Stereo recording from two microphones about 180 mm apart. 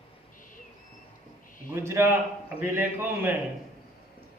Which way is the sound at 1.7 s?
15° right (ahead or behind).